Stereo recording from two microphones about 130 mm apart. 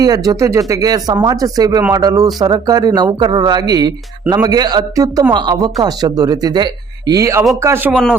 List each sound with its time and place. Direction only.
0.0 s speech: 30° right (ahead or behind)